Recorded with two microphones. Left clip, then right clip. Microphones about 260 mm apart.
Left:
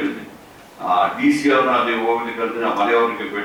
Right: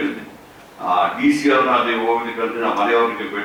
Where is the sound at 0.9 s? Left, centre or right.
Centre.